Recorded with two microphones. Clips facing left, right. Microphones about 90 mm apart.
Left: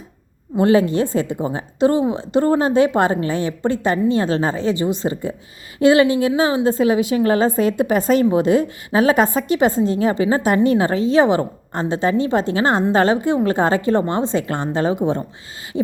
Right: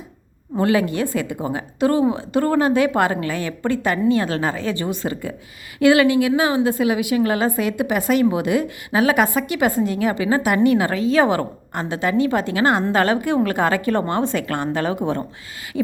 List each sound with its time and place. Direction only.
0.6 s a woman's voice: 30° left (ahead or behind)